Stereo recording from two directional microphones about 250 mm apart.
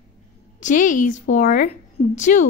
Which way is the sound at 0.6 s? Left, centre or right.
Left.